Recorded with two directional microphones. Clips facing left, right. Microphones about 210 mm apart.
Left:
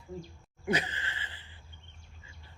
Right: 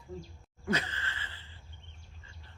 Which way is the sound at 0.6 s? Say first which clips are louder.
Left 2 dB; 15° left (ahead or behind).